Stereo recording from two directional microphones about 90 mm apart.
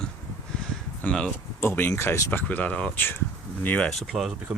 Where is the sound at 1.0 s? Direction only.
15° left (ahead or behind); by 2.3 s 30° left (ahead or behind).